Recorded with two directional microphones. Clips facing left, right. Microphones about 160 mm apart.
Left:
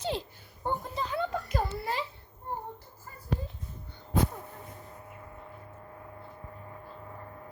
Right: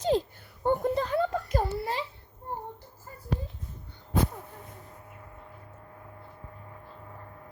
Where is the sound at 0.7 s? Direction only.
60° right (ahead or behind); by 2.0 s 30° right (ahead or behind).